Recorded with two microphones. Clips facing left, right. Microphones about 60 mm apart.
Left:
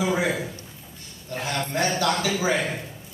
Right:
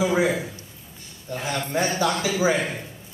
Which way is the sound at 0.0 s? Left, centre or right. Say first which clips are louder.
Right 3 dB; centre.